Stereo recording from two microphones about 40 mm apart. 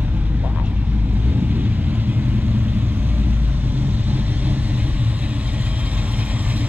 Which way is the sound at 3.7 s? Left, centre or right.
Right.